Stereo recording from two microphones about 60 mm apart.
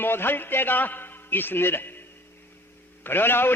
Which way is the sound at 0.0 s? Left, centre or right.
Left.